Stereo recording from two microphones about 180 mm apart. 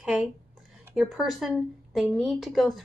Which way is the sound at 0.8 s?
5° right (ahead or behind).